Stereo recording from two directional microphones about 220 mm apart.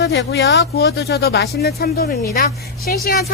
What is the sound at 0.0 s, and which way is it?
Speech, 50° left (ahead or behind).